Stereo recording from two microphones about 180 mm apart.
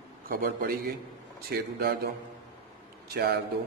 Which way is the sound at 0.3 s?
55° right (ahead or behind).